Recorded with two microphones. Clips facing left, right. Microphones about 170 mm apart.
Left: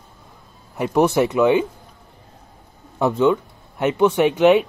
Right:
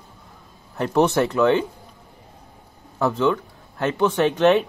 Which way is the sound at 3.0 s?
15° left (ahead or behind).